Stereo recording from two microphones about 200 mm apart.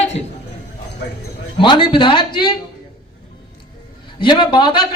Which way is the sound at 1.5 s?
25° left (ahead or behind).